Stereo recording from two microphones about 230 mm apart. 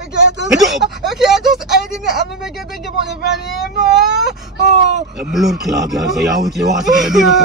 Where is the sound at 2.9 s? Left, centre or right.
Left.